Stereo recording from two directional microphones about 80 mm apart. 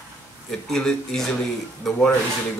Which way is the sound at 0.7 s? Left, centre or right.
Centre.